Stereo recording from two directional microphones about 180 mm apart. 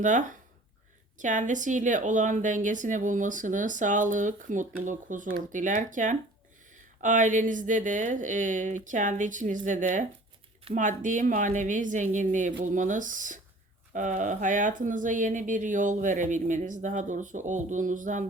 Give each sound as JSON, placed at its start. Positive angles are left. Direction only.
{"t": 0.0, "sound": "speech", "side_deg": -45}